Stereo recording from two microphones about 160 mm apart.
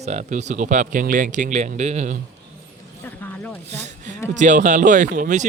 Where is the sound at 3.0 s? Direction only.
10° left (ahead or behind).